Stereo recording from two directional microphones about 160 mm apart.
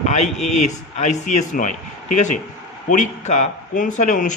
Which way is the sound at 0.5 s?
45° left (ahead or behind).